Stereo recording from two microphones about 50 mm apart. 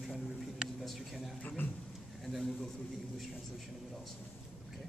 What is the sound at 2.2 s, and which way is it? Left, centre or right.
Speech, centre.